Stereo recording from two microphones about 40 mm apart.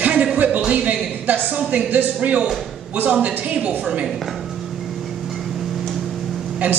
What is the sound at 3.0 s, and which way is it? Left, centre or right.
A man's voice, right.